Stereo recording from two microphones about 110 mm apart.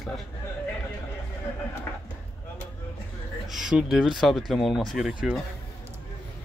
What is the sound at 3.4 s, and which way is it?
Speech, 5° right (ahead or behind).